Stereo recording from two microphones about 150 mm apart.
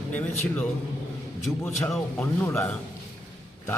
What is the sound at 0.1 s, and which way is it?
Speech, 10° left (ahead or behind).